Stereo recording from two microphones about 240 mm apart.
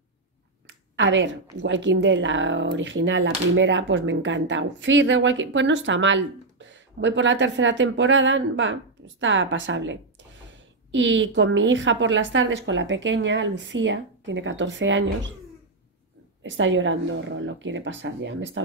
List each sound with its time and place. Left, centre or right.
0.7 s a woman's voice: right
16.4 s a woman's voice: right